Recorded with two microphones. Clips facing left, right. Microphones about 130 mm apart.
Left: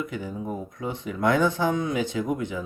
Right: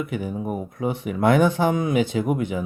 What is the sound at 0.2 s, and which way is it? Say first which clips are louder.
Speech: right 4 dB; 20° right (ahead or behind).